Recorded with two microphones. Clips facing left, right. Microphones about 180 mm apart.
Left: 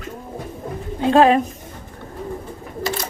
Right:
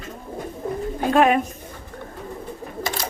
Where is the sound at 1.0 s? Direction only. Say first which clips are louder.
Left 4 dB; 30° left (ahead or behind).